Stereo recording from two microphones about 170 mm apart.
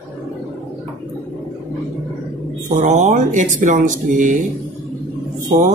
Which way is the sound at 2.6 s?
45° right (ahead or behind).